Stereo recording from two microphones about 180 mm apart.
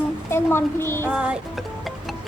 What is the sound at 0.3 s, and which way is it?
Speech, 15° left (ahead or behind).